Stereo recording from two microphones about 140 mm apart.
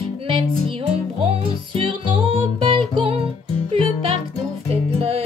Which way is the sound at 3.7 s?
40° right (ahead or behind).